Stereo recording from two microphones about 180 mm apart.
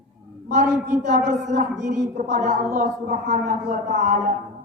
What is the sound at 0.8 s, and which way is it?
A woman's voice, 45° right (ahead or behind).